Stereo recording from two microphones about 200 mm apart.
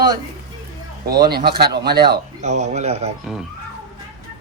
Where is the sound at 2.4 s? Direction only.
35° right (ahead or behind).